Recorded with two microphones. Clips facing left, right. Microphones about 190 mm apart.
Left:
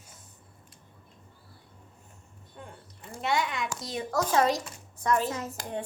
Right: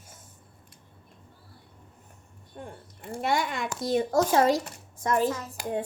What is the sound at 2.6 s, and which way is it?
Speech, 30° right (ahead or behind).